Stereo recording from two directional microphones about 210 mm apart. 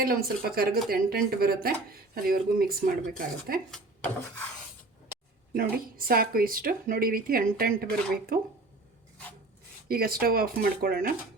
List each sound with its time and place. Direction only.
0.5 s speech: 45° right (ahead or behind)
3.7 s rub: 5° left (ahead or behind)
5.5 s speech: 45° right (ahead or behind)
9.9 s speech: 45° right (ahead or behind)